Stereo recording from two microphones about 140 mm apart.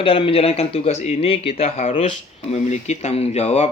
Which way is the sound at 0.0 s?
40° left (ahead or behind).